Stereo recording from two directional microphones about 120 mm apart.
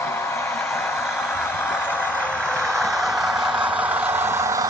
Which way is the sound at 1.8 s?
10° left (ahead or behind).